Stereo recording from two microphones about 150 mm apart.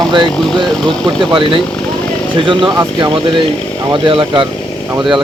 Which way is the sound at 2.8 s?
25° right (ahead or behind).